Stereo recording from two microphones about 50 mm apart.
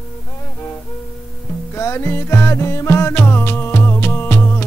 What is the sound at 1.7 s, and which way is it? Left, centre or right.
Music, left.